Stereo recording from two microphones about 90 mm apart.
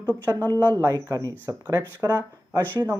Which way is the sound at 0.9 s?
40° right (ahead or behind).